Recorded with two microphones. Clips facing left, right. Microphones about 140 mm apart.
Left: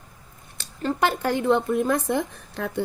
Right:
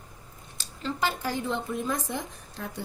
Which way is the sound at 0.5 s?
55° left (ahead or behind).